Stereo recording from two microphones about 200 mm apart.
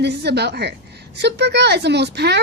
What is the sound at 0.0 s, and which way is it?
Speech, 55° right (ahead or behind).